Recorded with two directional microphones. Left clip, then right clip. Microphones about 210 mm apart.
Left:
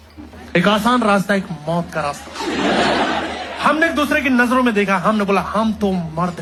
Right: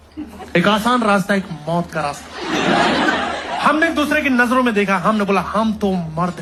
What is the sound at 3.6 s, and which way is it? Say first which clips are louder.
A man's voice: even; centre (ahead or behind).